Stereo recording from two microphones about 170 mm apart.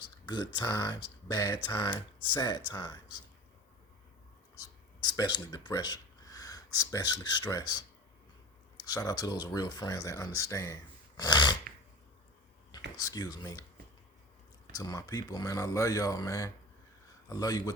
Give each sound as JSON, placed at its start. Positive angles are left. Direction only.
{"t": 0.0, "sound": "speech", "side_deg": 25}
{"t": 5.0, "sound": "speech", "side_deg": 25}
{"t": 8.8, "sound": "speech", "side_deg": 20}
{"t": 13.0, "sound": "speech", "side_deg": 20}
{"t": 14.8, "sound": "speech", "side_deg": 20}